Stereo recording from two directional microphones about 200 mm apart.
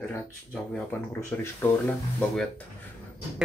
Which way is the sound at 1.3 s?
10° left (ahead or behind).